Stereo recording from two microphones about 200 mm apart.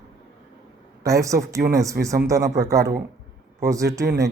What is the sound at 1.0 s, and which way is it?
Speech, 15° right (ahead or behind).